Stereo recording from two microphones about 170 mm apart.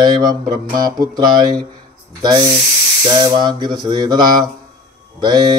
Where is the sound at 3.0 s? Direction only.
25° right (ahead or behind).